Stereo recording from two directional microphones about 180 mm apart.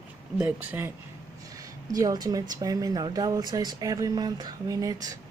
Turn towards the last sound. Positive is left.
turn(degrees=-20)  # may be behind; listen again after turning